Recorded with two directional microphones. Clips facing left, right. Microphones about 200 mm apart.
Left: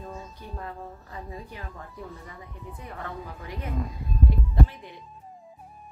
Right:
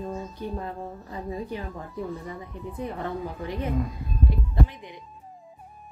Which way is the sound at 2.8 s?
25° right (ahead or behind).